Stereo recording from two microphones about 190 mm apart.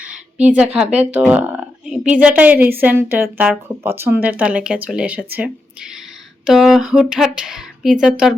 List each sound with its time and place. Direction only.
0.4 s speech: 5° right (ahead or behind)